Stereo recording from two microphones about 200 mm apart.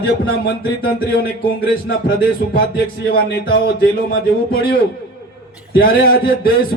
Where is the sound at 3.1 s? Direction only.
50° left (ahead or behind).